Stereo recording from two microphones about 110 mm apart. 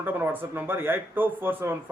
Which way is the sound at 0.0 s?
20° right (ahead or behind).